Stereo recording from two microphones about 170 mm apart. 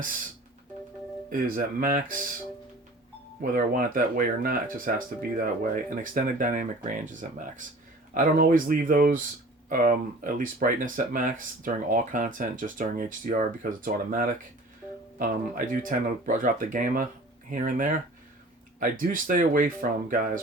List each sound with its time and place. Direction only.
1.3 s speech: 55° right (ahead or behind)
3.4 s speech: 55° right (ahead or behind)